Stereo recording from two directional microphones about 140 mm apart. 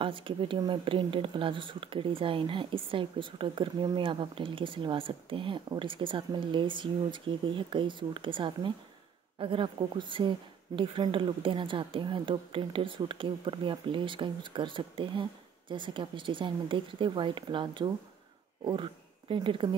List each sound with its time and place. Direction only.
0.0 s speech: 35° right (ahead or behind)